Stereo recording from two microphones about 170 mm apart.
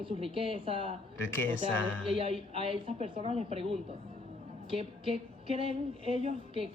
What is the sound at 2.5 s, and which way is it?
A woman's voice, 35° right (ahead or behind).